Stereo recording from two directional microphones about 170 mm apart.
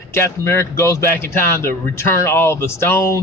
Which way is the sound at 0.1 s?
15° left (ahead or behind).